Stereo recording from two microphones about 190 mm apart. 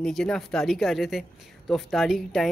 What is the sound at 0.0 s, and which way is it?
Speech, 5° left (ahead or behind).